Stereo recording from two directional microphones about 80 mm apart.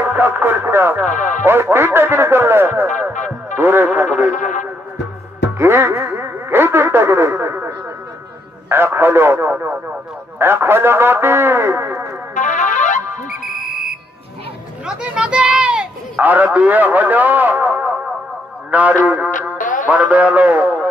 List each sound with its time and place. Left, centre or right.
0.0 s music: right
5.6 s music: right
6.2 s radio: right
8.6 s speech: right
10.4 s music: right
13.5 s music: centre
14.9 s a sound: centre
16.2 s a man's voice: right